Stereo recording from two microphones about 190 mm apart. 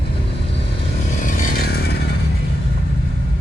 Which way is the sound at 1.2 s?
45° left (ahead or behind).